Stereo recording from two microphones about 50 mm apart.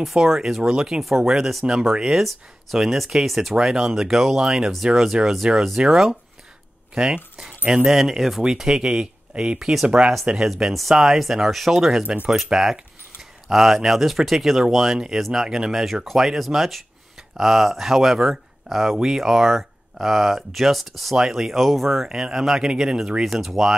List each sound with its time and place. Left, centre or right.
0.0 s speech: centre
7.3 s speech: centre
9.3 s speech: right
9.6 s speech: centre
9.8 s speech: right
10.3 s speech: centre
23.2 s speech: centre